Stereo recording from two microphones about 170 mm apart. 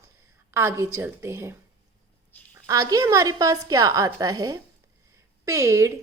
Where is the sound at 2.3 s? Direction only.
10° left (ahead or behind).